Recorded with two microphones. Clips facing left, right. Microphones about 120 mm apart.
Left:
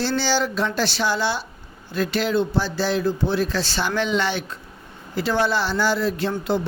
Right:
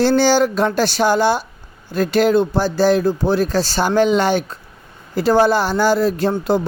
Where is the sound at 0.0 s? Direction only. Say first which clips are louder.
Right 8 dB; 50° right (ahead or behind).